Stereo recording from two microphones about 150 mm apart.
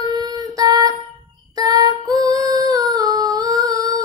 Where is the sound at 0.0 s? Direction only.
25° right (ahead or behind).